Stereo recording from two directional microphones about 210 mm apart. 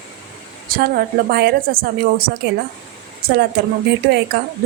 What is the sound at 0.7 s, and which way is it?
A woman's voice, 45° right (ahead or behind).